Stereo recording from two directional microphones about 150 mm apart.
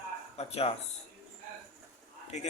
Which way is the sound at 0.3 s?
45° left (ahead or behind).